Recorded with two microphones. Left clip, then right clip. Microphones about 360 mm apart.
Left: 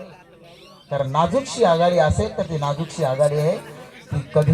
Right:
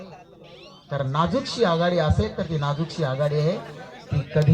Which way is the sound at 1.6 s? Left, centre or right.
Centre.